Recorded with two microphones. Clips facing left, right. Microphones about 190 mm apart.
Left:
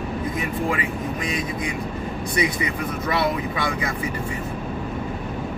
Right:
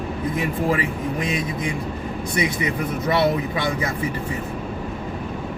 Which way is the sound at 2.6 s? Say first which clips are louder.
Right 3 dB; 25° right (ahead or behind).